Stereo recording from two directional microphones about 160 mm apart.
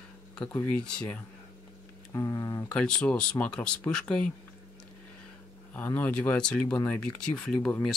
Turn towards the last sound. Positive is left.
turn(degrees=5)  # may be behind; listen again after turning